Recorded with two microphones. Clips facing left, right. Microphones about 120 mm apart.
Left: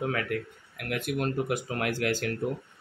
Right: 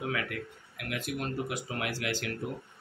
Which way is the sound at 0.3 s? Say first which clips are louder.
Left 7 dB; 45° left (ahead or behind).